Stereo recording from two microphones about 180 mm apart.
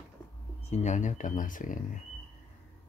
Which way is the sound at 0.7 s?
40° left (ahead or behind).